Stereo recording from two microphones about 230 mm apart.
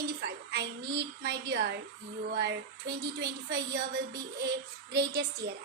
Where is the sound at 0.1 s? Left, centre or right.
Right.